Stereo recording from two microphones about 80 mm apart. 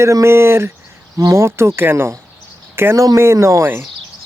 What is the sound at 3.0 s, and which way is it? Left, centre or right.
Speech, right.